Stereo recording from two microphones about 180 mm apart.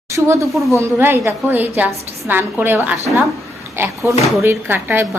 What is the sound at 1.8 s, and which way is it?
Speech, centre (ahead or behind).